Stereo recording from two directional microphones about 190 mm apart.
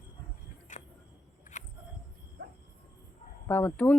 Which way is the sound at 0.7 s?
40° left (ahead or behind).